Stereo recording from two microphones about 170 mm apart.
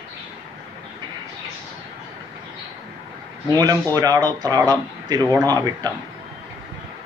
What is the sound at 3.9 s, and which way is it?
Speech, 20° right (ahead or behind).